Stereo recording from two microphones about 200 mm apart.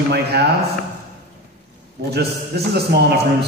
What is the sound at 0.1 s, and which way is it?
Speech, 55° right (ahead or behind).